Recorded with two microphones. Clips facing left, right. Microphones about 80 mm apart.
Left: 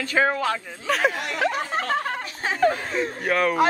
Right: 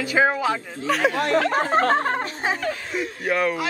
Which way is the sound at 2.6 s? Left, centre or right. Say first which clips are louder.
Left 5 dB; left.